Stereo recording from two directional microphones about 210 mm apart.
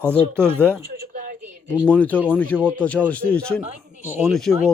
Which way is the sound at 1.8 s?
5° left (ahead or behind).